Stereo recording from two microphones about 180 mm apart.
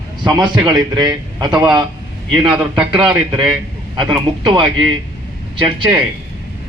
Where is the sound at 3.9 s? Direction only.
25° right (ahead or behind).